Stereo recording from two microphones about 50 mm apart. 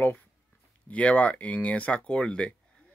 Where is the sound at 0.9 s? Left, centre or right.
Left.